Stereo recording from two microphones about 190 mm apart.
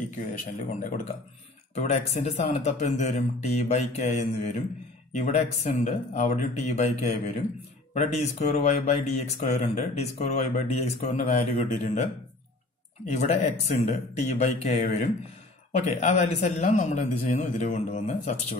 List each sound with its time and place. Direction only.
0.3 s speech: 40° left (ahead or behind)